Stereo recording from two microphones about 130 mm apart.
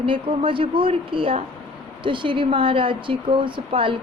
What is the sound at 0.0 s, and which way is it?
A woman's voice, 45° right (ahead or behind).